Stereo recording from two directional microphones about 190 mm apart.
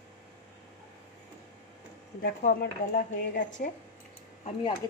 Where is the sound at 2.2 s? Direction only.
45° left (ahead or behind).